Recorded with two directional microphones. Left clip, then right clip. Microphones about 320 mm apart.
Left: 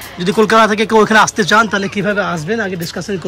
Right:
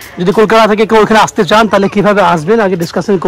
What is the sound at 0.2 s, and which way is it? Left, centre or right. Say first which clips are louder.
Speech: right 4 dB; centre.